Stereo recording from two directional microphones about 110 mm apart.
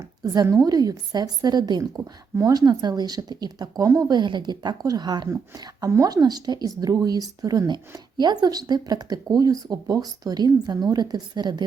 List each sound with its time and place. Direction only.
0.2 s a woman's voice: 30° right (ahead or behind)
4.2 s a woman's voice: 45° right (ahead or behind)